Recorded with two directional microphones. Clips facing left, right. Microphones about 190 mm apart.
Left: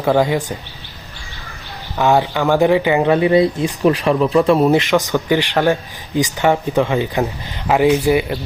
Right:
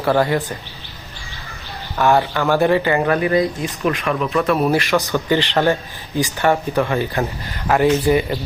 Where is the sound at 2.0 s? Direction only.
15° left (ahead or behind).